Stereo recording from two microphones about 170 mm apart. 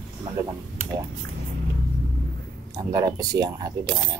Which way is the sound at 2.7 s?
20° right (ahead or behind).